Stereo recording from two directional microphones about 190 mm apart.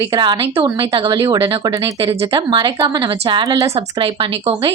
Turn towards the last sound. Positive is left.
turn(degrees=-15)  # may be behind; listen again after turning